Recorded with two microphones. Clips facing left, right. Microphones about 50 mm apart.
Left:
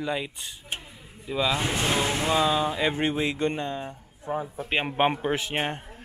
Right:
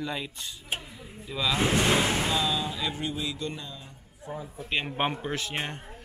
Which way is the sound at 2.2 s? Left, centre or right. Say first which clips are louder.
Left 5 dB; left.